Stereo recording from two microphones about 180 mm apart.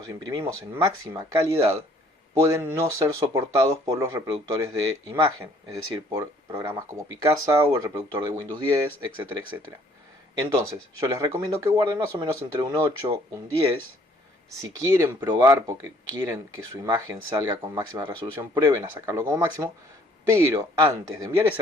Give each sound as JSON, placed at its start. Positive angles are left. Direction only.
{"t": 0.1, "sound": "speech", "side_deg": -20}
{"t": 11.0, "sound": "speech", "side_deg": -15}
{"t": 14.6, "sound": "speech", "side_deg": -15}